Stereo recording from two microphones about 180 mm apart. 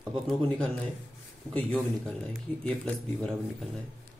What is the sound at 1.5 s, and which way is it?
Speech, 5° left (ahead or behind).